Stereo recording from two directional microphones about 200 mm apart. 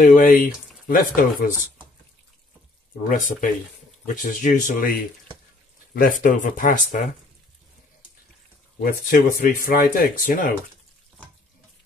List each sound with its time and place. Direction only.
0.0 s speech: 40° left (ahead or behind)
3.0 s speech: 45° left (ahead or behind)
5.9 s speech: 45° left (ahead or behind)
8.8 s speech: 45° left (ahead or behind)